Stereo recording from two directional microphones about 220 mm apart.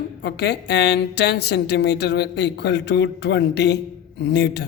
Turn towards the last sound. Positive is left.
turn(degrees=50)  # may be behind; listen again after turning